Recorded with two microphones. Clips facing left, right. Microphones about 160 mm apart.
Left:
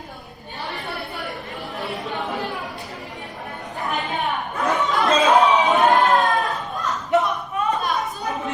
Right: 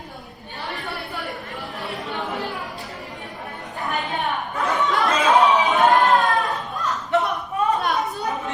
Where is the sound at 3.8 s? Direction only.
Centre (ahead or behind).